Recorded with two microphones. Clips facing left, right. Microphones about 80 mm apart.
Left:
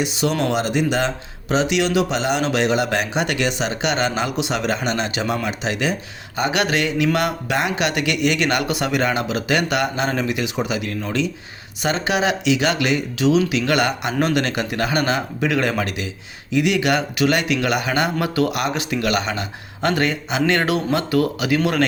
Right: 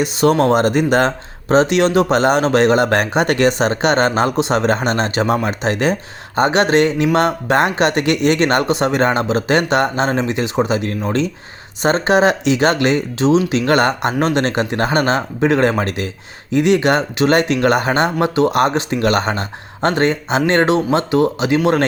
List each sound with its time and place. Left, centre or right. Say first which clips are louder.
0.0 s speech: right 7 dB; right